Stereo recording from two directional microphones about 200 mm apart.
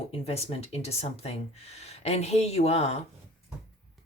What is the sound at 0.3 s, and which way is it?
Speech, 30° left (ahead or behind).